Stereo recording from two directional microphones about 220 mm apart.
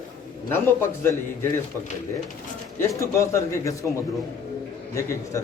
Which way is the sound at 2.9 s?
15° left (ahead or behind).